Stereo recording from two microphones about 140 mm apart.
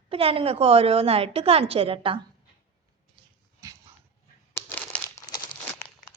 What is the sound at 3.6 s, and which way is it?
Dog, 20° right (ahead or behind).